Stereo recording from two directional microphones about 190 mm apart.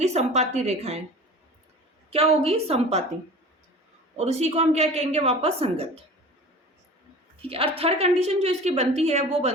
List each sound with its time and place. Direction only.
0.0 s a woman's voice: 35° right (ahead or behind)
2.0 s a woman's voice: 30° right (ahead or behind)
4.2 s a woman's voice: 35° right (ahead or behind)
7.4 s a woman's voice: 30° right (ahead or behind)